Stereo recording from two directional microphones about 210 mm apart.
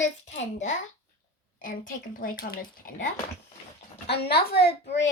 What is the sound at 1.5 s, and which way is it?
A woman's voice, 40° left (ahead or behind).